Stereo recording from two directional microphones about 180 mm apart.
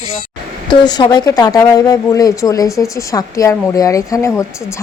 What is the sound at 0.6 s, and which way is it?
A woman's voice, 25° left (ahead or behind).